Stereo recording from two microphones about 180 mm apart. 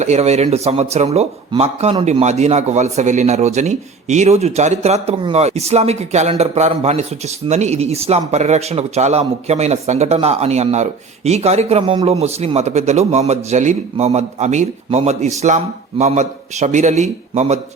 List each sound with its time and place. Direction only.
0.0 s speech: 35° right (ahead or behind)